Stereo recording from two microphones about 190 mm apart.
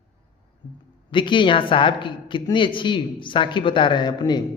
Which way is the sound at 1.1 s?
25° left (ahead or behind).